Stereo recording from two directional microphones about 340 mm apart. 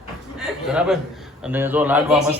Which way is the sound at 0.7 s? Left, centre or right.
Centre.